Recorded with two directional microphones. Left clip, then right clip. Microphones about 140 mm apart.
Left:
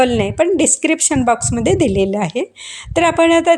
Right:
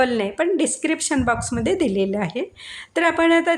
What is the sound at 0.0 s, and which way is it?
A woman's voice, 40° left (ahead or behind).